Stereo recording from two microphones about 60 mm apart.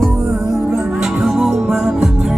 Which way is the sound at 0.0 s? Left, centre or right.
Centre.